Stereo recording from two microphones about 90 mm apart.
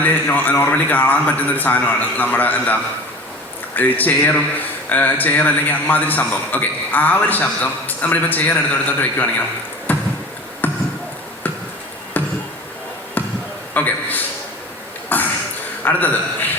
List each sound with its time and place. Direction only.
0.0 s speech: 20° left (ahead or behind)
3.8 s speech: 20° left (ahead or behind)
9.9 s a sound: 20° left (ahead or behind)
10.6 s basketball bounce: 20° left (ahead or behind)
12.1 s basketball bounce: 20° left (ahead or behind)
13.7 s a man's voice: 20° left (ahead or behind)
15.1 s a sound: 20° left (ahead or behind)
15.8 s a man's voice: 20° left (ahead or behind)